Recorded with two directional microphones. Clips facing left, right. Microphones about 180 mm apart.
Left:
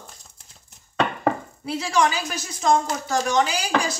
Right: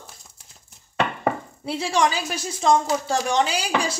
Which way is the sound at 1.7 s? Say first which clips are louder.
Even; 30° right (ahead or behind).